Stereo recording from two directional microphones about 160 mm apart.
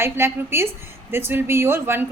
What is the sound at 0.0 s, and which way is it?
A woman's voice, 15° right (ahead or behind).